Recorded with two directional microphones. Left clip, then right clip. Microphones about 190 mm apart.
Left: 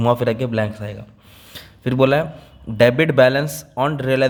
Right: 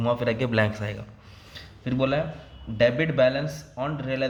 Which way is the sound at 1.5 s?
50° left (ahead or behind).